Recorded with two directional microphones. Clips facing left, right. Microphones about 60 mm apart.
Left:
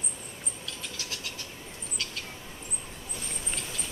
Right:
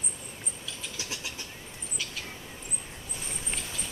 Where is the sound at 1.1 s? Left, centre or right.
Centre.